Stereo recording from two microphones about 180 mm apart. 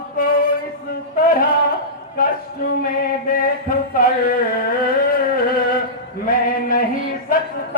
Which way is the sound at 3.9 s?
55° left (ahead or behind).